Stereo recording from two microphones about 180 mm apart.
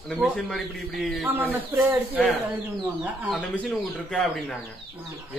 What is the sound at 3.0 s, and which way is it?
Speech, 5° right (ahead or behind).